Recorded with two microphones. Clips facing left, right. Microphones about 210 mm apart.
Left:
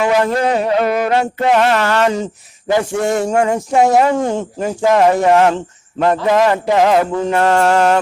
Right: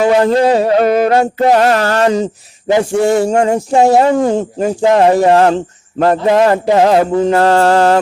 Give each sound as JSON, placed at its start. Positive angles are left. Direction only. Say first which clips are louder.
{"t": 0.0, "sound": "speech", "louder": "right 5 dB", "side_deg": -30}